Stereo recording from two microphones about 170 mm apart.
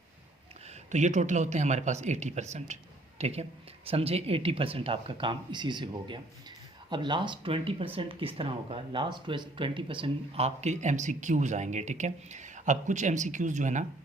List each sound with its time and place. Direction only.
0.9 s speech: 45° right (ahead or behind)